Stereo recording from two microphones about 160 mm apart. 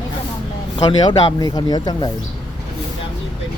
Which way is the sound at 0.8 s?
25° left (ahead or behind).